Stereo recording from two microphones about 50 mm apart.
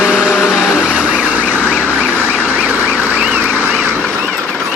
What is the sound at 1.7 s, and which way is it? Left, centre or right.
Emergency vehicle, left.